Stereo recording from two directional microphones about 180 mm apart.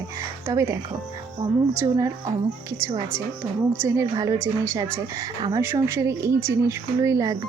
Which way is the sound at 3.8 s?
20° right (ahead or behind).